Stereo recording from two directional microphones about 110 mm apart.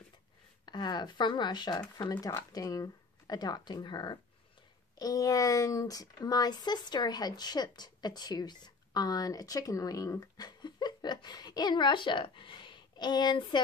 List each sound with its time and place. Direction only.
0.7 s speech: 40° left (ahead or behind)